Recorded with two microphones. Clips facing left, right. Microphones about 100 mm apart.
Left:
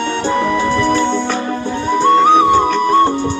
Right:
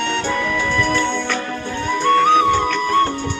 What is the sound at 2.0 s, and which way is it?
Music, 20° left (ahead or behind).